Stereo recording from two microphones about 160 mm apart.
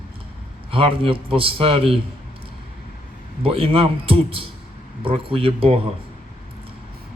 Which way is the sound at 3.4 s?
35° right (ahead or behind).